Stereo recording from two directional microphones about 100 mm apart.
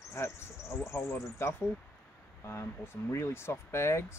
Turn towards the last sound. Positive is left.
turn(degrees=25)  # may be behind; listen again after turning